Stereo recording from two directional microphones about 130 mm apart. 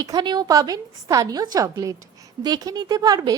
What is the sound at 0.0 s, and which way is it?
A woman's voice, 30° right (ahead or behind).